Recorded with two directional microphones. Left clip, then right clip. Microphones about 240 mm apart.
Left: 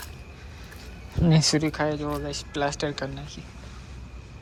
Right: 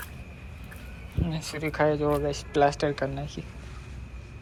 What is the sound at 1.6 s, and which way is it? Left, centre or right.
Speech, centre.